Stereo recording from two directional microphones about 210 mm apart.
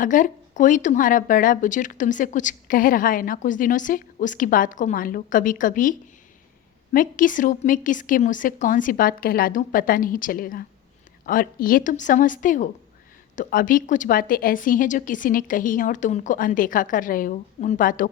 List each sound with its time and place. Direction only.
0.0 s speech: 40° left (ahead or behind)